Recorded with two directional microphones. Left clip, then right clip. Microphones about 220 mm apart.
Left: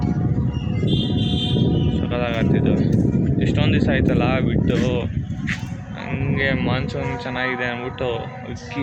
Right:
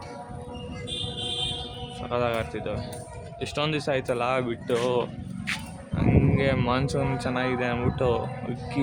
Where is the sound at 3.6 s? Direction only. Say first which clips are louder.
Left 3 dB; 10° right (ahead or behind).